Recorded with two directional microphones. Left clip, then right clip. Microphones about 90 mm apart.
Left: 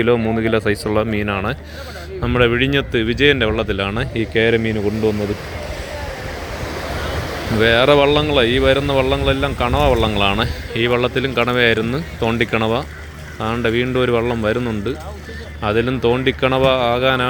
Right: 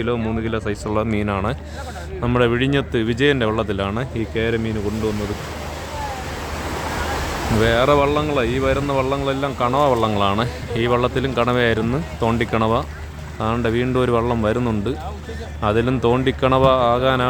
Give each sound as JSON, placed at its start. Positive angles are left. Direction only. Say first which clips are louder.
{"t": 0.3, "sound": "speech", "louder": "left 7 dB", "side_deg": 35}
{"t": 1.0, "sound": "speech", "louder": "left 2 dB", "side_deg": 5}
{"t": 4.1, "sound": "speech", "louder": "left 6 dB", "side_deg": 35}
{"t": 7.6, "sound": "speech", "louder": "left 4 dB", "side_deg": 15}